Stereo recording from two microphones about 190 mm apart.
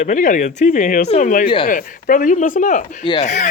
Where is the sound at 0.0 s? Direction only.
40° left (ahead or behind).